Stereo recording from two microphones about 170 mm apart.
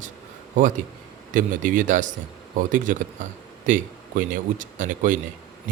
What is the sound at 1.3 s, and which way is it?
Speech, 50° right (ahead or behind).